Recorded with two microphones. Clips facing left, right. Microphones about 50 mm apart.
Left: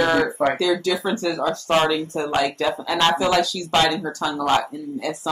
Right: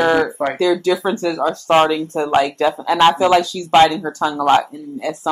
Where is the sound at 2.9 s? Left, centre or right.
Right.